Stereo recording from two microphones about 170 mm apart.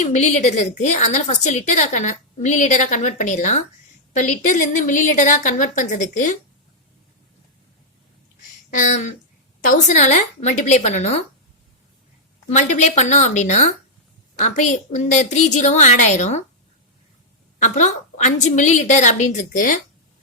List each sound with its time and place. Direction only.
0.0 s a woman's voice: 45° left (ahead or behind)
8.7 s a woman's voice: 45° left (ahead or behind)
12.5 s a woman's voice: 45° left (ahead or behind)
17.6 s a woman's voice: 45° left (ahead or behind)